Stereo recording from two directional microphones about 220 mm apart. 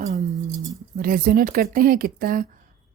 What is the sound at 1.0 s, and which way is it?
Speech, 40° right (ahead or behind).